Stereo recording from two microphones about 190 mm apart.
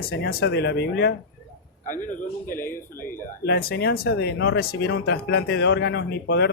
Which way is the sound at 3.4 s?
55° left (ahead or behind).